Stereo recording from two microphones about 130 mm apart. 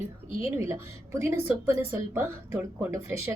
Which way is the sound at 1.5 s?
15° right (ahead or behind).